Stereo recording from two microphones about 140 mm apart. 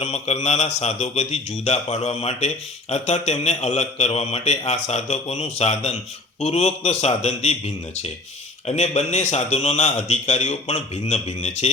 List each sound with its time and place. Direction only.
0.0 s a man's voice: 50° left (ahead or behind)